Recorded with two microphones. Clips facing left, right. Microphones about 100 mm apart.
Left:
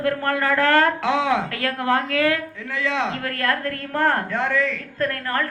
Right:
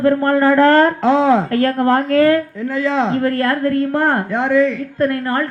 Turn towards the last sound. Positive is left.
turn(degrees=-25)  # may be behind; listen again after turning